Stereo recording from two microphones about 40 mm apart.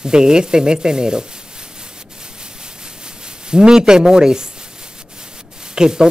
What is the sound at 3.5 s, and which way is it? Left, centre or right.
Speech, centre.